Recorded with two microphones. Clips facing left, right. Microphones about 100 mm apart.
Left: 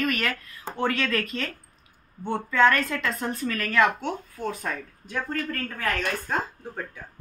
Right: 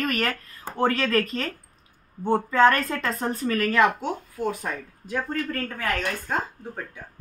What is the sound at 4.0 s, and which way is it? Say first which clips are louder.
Speech: right 2 dB; 10° right (ahead or behind).